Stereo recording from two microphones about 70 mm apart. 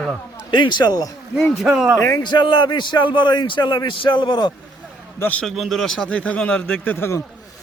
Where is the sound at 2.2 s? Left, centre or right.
Left.